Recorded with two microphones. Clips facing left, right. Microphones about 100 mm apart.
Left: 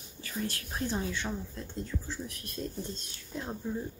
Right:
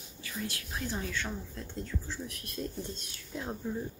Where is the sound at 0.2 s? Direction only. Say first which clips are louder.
Left 3 dB; 40° left (ahead or behind).